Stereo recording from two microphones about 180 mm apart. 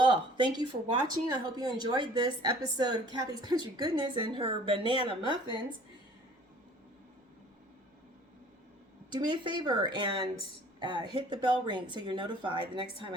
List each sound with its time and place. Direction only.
0.0 s speech: 25° right (ahead or behind)
9.1 s speech: 25° right (ahead or behind)